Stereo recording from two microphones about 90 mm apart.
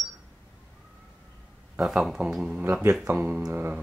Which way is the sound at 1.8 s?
Centre (ahead or behind).